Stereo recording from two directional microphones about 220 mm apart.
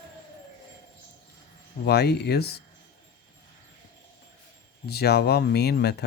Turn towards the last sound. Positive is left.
turn(degrees=50)  # may be behind; listen again after turning